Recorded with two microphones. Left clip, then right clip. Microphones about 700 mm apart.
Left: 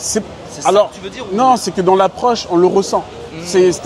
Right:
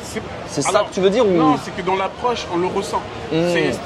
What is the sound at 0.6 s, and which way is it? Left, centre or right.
Speech, centre.